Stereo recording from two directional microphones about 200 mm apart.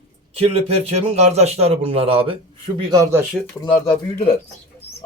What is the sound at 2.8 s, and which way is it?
Speech, 20° right (ahead or behind).